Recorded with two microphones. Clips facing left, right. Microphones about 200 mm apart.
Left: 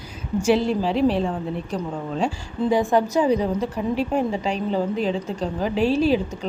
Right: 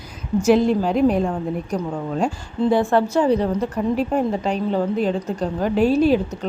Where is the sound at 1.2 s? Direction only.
5° right (ahead or behind).